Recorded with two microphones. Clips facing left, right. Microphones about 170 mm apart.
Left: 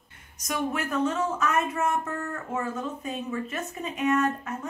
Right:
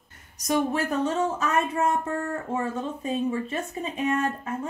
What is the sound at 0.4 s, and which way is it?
A woman's voice, 35° right (ahead or behind).